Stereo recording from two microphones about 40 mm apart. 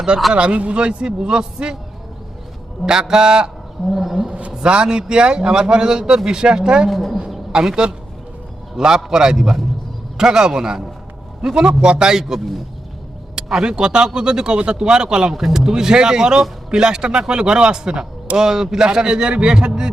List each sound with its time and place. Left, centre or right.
0.3 s a man's voice: right
2.8 s a man's voice: centre
3.9 s speech: centre
4.2 s a sound: right
4.6 s a man's voice: right
6.8 s speech: centre
7.5 s a man's voice: centre
8.7 s a man's voice: centre
13.7 s a man's voice: centre